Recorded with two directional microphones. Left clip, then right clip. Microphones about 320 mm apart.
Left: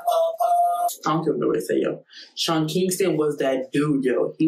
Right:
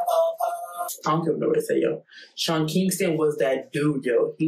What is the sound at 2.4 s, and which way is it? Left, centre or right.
Speech, centre.